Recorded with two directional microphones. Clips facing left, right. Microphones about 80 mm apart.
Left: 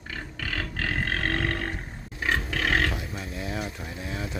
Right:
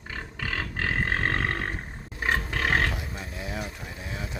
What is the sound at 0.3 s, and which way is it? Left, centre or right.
Grunt, right.